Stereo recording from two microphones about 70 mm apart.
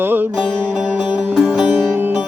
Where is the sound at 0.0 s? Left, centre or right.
Right.